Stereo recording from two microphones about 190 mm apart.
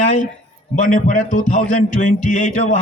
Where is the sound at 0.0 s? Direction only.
40° left (ahead or behind).